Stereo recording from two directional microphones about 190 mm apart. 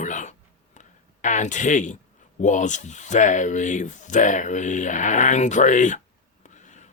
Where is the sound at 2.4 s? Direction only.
40° left (ahead or behind).